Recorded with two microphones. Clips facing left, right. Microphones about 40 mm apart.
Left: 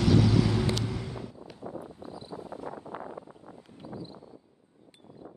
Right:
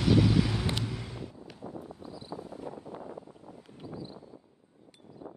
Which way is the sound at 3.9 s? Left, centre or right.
Left.